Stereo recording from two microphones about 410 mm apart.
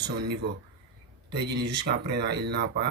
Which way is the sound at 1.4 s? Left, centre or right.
Right.